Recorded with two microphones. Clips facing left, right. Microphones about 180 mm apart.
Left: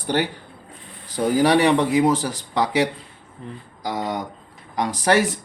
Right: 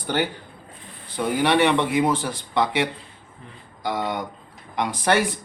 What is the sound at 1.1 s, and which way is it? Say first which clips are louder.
Speech: left 3 dB; 40° left (ahead or behind).